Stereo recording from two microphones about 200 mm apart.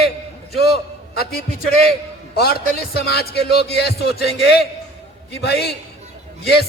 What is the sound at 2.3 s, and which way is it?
Speech, 50° left (ahead or behind).